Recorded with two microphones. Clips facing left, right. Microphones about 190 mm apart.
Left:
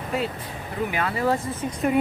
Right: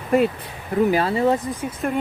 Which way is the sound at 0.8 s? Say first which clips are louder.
Right 4 dB; 30° right (ahead or behind).